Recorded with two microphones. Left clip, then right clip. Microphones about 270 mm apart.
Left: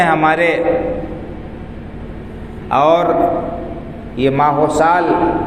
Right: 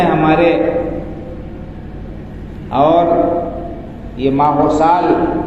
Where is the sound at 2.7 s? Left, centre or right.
Left.